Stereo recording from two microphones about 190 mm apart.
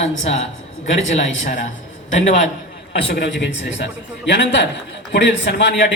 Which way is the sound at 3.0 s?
70° left (ahead or behind).